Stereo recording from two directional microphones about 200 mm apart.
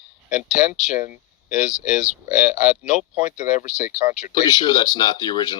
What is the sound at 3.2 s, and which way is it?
Speech, 35° left (ahead or behind).